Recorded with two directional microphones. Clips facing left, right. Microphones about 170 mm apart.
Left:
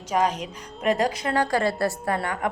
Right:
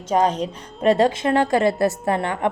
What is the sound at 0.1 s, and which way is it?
A woman's voice, 30° right (ahead or behind).